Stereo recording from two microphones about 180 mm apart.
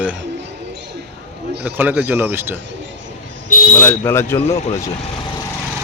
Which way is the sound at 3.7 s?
10° left (ahead or behind).